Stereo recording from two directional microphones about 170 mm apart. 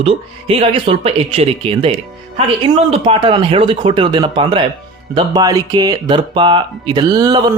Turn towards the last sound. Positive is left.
turn(degrees=-25)  # may be behind; listen again after turning